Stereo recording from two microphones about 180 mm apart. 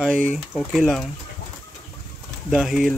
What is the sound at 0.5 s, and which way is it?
Speech, centre (ahead or behind).